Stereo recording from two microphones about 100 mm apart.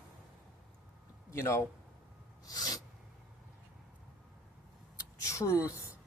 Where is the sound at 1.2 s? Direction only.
30° left (ahead or behind).